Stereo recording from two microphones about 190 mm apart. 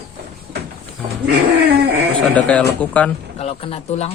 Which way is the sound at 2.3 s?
5° left (ahead or behind).